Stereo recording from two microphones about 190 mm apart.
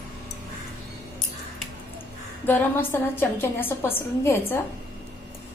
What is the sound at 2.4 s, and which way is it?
A woman's voice, 10° left (ahead or behind).